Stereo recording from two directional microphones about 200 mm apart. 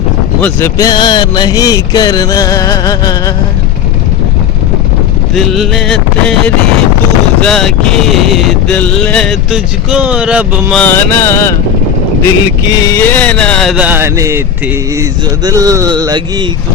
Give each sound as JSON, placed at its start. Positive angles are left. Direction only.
{"t": 0.4, "sound": "speech", "side_deg": 15}
{"t": 5.3, "sound": "speech", "side_deg": 0}
{"t": 7.4, "sound": "speech", "side_deg": 0}
{"t": 10.8, "sound": "speech", "side_deg": 10}
{"t": 15.4, "sound": "speech", "side_deg": -20}